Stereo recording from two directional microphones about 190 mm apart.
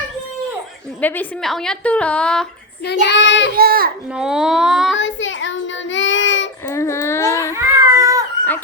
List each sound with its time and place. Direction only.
1.0 s a woman's voice: 10° left (ahead or behind)
3.1 s child singing: 70° left (ahead or behind)
3.5 s a child's voice: 50° right (ahead or behind)
4.2 s a woman's voice: 5° right (ahead or behind)
4.9 s child singing: 80° left
6.7 s babbling: 15° left (ahead or behind)
7.5 s cat: 15° right (ahead or behind)